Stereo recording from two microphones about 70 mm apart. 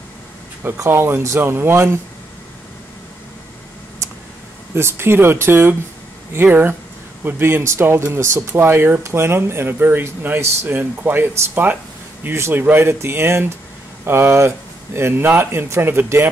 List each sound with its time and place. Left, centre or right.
0.7 s speech: right
4.7 s speech: right